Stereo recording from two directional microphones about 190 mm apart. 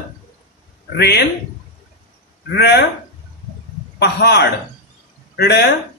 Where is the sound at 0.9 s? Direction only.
60° left (ahead or behind).